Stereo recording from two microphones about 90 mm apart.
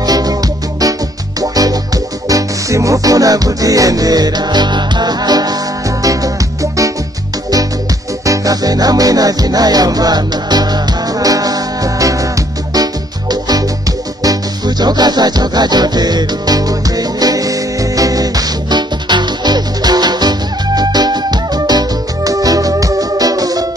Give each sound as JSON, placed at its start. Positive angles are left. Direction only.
{"t": 0.0, "sound": "music", "side_deg": -45}
{"t": 8.3, "sound": "music", "side_deg": -45}
{"t": 13.3, "sound": "music", "side_deg": -45}